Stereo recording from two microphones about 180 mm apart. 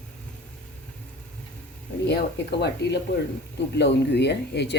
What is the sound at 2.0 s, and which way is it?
Speech, 65° left (ahead or behind).